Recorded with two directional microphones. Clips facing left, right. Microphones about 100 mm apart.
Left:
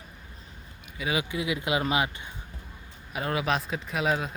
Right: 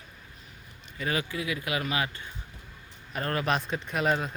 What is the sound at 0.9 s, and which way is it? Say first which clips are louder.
Speech: left 1 dB; 10° left (ahead or behind).